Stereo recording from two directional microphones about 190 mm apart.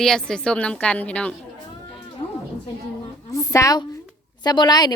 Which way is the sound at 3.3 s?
15° left (ahead or behind).